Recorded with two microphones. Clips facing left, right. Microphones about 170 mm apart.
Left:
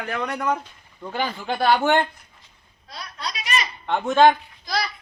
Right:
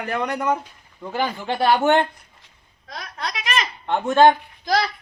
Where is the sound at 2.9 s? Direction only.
85° right.